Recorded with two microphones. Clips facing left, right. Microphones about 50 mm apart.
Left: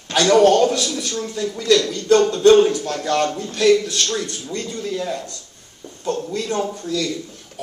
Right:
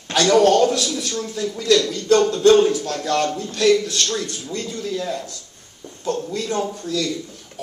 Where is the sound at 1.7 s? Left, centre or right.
Centre.